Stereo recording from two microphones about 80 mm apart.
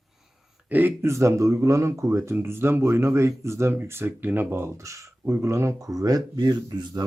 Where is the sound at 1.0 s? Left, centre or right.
Right.